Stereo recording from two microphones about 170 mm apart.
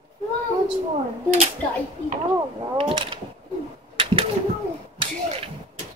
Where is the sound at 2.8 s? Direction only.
30° right (ahead or behind).